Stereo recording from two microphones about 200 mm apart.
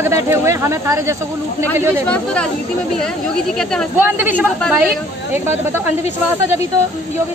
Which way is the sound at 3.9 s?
10° right (ahead or behind).